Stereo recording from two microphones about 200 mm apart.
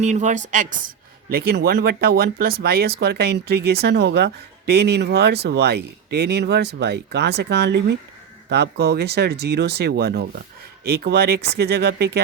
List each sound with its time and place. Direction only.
0.0 s a woman's voice: 35° right (ahead or behind)
1.3 s speech: 50° right (ahead or behind)